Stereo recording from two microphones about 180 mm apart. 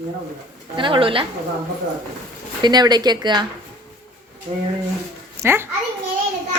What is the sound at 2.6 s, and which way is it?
Speech, 25° right (ahead or behind).